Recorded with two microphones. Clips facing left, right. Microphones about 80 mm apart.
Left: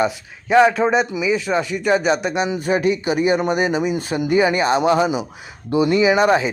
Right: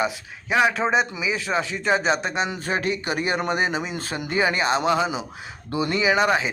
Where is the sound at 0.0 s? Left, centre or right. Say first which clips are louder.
Left 5 dB; centre; by 3.8 s right.